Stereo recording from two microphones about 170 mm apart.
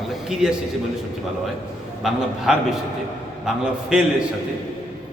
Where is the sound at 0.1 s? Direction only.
5° right (ahead or behind).